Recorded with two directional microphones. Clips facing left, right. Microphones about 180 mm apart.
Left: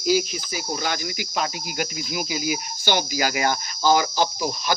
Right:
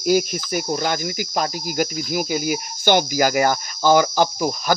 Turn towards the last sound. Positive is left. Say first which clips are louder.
# right 4 dB
turn(degrees=-50)  # may be behind; listen again after turning